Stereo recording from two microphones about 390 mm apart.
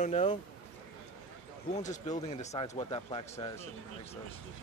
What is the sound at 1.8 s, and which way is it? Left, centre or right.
Speech, centre.